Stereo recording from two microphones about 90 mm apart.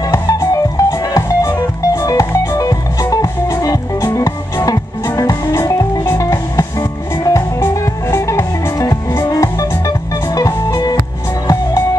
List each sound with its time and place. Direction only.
0.1 s music: 40° left (ahead or behind)
5.5 s music: 30° left (ahead or behind); by 11.0 s 45° left (ahead or behind)